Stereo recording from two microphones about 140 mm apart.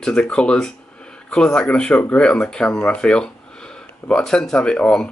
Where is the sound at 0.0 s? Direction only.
5° left (ahead or behind).